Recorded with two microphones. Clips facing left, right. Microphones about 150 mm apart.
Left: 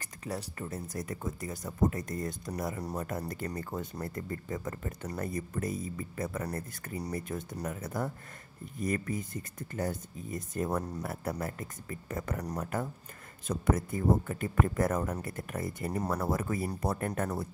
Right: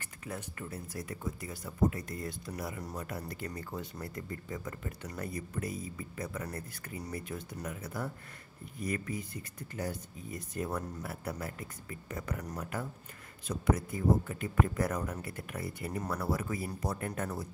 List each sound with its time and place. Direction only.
0.0 s speech: 35° left (ahead or behind); by 17.5 s 50° left (ahead or behind)